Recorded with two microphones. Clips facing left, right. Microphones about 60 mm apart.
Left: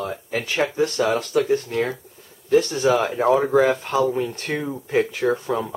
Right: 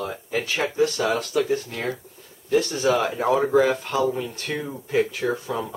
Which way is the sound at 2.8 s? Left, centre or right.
Centre.